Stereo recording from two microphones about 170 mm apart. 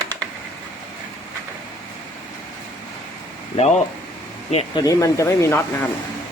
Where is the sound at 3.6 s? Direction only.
40° left (ahead or behind).